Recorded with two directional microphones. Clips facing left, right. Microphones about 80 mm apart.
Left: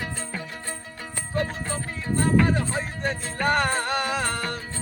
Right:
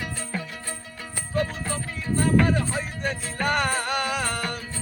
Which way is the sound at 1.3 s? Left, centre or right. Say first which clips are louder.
Right 1 dB; left.